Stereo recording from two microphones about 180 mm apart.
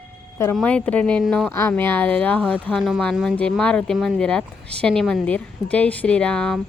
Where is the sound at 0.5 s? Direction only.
10° left (ahead or behind).